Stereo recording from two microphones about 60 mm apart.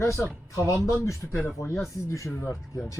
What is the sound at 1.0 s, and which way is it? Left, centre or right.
A man's voice, left.